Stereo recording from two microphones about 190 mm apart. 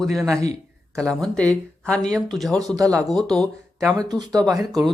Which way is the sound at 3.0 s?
Centre (ahead or behind).